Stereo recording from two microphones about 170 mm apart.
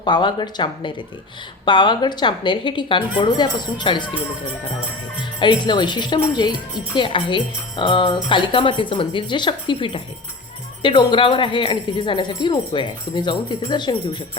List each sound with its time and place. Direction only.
0.0 s speech: 25° left (ahead or behind)
5.4 s speech: 25° left (ahead or behind)